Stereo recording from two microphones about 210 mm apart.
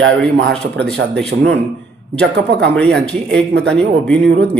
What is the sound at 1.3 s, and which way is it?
Speech, 55° right (ahead or behind).